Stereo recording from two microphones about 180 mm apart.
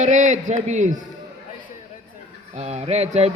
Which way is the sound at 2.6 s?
35° right (ahead or behind).